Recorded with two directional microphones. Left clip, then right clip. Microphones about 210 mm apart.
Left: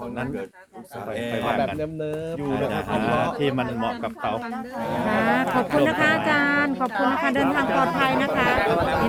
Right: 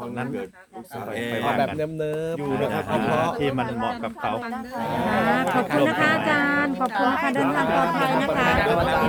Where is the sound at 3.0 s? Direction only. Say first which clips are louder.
Even; 35° left (ahead or behind).